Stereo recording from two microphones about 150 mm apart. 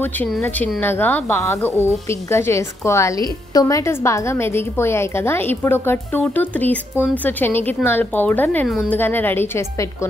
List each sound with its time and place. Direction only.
0.0 s a woman's voice: 10° left (ahead or behind)
8.9 s a woman's voice: 15° left (ahead or behind)